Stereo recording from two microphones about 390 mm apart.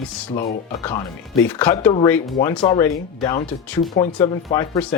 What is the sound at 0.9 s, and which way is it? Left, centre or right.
Speech, centre.